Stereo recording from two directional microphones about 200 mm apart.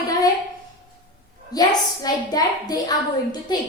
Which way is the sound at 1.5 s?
20° left (ahead or behind).